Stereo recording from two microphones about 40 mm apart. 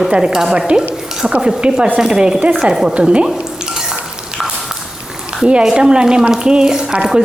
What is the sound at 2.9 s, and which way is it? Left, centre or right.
Speech, right.